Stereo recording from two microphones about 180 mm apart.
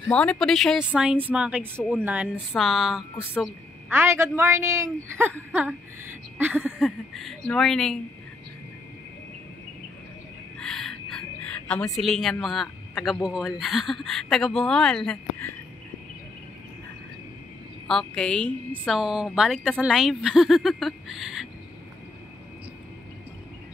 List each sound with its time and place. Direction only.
0.1 s speech: 5° left (ahead or behind)
3.9 s a woman's voice: 15° right (ahead or behind); by 8.0 s 5° left (ahead or behind)
10.6 s speech: 5° left (ahead or behind)
17.8 s speech: 5° left (ahead or behind)